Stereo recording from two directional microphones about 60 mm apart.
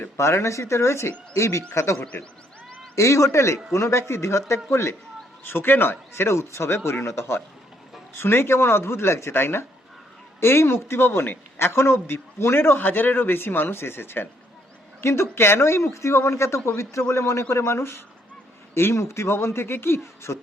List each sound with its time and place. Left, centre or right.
0.2 s speech: left
5.4 s speech: left